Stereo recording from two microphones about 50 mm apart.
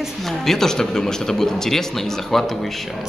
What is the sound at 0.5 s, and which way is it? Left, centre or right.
Speech, centre.